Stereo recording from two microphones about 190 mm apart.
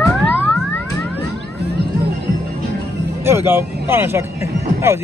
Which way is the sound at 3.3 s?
10° right (ahead or behind).